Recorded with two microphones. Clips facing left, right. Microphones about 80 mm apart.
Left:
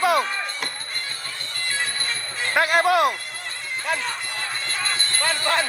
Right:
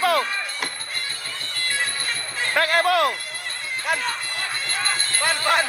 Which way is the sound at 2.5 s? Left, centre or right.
Centre.